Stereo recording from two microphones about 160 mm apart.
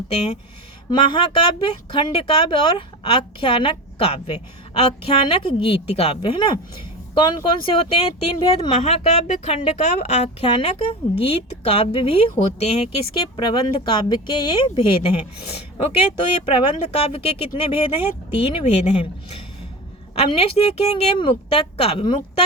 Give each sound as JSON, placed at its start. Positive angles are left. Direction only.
{"t": 0.9, "sound": "a woman's voice", "side_deg": 30}
{"t": 7.6, "sound": "a woman's voice", "side_deg": 35}
{"t": 8.8, "sound": "a woman's voice", "side_deg": 40}
{"t": 13.2, "sound": "a woman's voice", "side_deg": 25}